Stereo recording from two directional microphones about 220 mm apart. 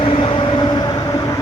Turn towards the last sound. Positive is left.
turn(degrees=20)  # may be behind; listen again after turning